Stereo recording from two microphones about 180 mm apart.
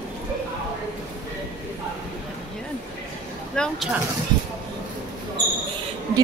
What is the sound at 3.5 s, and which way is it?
Speech, 5° left (ahead or behind).